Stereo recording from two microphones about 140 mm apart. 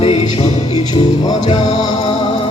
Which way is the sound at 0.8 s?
35° left (ahead or behind).